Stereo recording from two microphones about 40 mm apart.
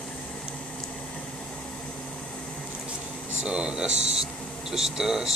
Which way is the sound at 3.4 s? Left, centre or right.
Right.